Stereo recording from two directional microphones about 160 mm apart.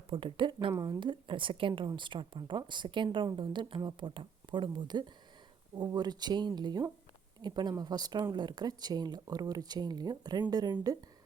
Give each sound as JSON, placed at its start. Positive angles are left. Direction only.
{"t": 0.1, "sound": "a woman's voice", "side_deg": -30}